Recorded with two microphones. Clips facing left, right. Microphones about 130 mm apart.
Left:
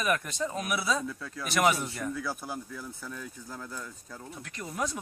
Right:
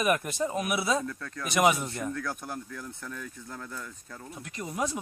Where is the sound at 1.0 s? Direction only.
5° left (ahead or behind).